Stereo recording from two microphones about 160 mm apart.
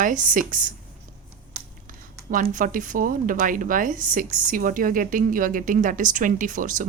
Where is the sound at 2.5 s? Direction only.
55° right (ahead or behind).